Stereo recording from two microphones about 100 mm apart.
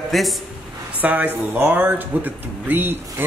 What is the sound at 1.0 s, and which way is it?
Speech, 15° right (ahead or behind).